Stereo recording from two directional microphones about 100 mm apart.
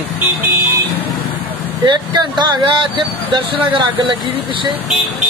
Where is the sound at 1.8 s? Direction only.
50° right (ahead or behind).